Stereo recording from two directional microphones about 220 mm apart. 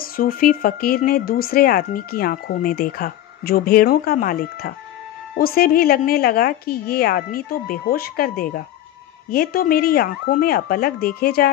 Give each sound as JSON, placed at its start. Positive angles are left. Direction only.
{"t": 0.0, "sound": "speech", "side_deg": 40}